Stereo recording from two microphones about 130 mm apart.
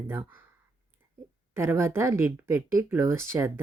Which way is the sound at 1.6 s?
20° right (ahead or behind).